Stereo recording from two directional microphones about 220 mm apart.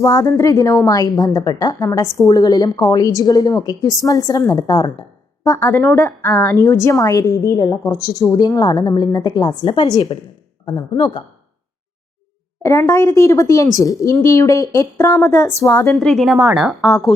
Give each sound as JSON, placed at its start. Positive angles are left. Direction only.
{"t": 0.0, "sound": "a woman's voice", "side_deg": 15}
{"t": 12.6, "sound": "a woman's voice", "side_deg": 15}
{"t": 15.9, "sound": "a woman's voice", "side_deg": 0}